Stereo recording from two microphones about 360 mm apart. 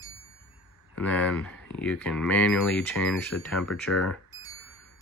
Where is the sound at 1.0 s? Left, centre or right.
Centre.